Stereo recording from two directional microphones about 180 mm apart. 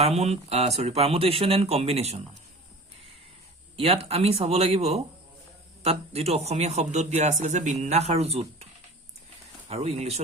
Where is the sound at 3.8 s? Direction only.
35° right (ahead or behind).